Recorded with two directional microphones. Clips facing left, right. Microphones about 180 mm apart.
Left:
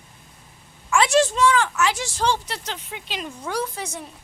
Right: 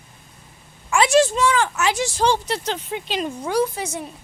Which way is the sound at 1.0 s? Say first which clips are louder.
Right 2 dB; 5° right (ahead or behind).